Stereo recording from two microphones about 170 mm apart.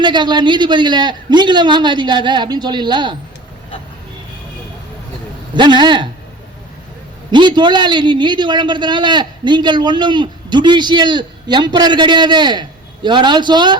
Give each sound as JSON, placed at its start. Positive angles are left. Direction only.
{"t": 0.0, "sound": "a man's voice", "side_deg": -25}
{"t": 5.5, "sound": "a man's voice", "side_deg": -25}
{"t": 7.3, "sound": "a man's voice", "side_deg": -25}